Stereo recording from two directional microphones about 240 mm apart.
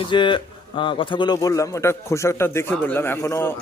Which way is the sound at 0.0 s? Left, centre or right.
Centre.